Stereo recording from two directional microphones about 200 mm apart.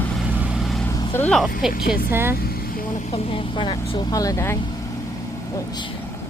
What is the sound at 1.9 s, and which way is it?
Speech, 10° right (ahead or behind).